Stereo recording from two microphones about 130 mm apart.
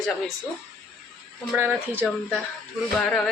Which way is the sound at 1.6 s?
15° right (ahead or behind).